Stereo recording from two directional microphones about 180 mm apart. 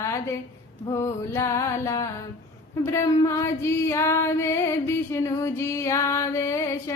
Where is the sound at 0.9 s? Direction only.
15° left (ahead or behind).